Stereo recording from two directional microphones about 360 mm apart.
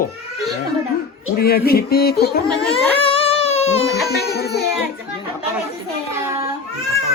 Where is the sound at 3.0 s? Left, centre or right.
Centre.